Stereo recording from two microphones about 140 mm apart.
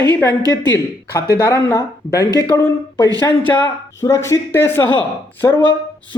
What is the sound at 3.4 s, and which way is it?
Speech, 15° left (ahead or behind).